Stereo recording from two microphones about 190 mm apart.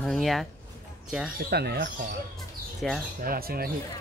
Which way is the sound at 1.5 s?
60° right (ahead or behind).